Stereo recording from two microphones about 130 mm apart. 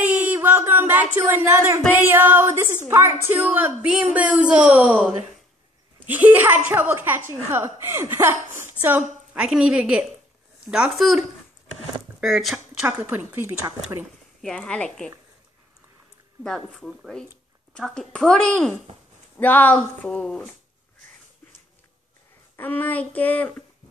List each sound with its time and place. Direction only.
0.0 s a sound: 10° right (ahead or behind)
1.1 s a woman's voice: 15° right (ahead or behind)
12.8 s a woman's voice: 15° right (ahead or behind)
14.4 s speech: 5° left (ahead or behind)
16.4 s speech: 5° left (ahead or behind)
22.6 s speech: 15° left (ahead or behind)